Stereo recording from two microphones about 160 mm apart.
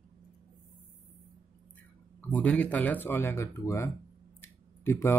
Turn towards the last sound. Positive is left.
turn(degrees=15)  # may be behind; listen again after turning